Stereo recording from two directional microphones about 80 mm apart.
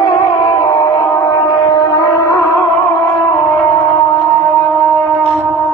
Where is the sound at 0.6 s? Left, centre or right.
Left.